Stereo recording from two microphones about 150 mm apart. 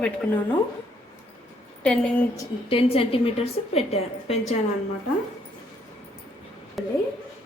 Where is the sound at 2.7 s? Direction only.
40° left (ahead or behind).